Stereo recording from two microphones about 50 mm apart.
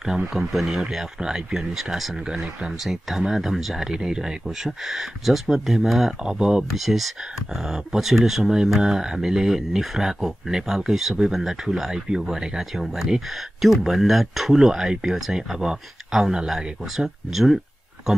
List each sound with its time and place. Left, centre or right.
0.0 s speech: centre
0.5 s speech: centre
0.8 s speech: centre
6.7 s speech: centre